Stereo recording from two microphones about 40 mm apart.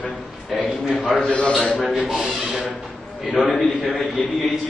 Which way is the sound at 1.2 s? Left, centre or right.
Left.